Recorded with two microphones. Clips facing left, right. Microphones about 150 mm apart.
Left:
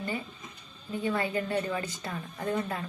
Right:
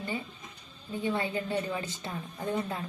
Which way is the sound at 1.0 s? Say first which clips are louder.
Left 1 dB; 25° right (ahead or behind).